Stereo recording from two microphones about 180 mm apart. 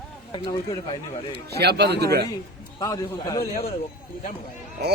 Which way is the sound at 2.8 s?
20° left (ahead or behind).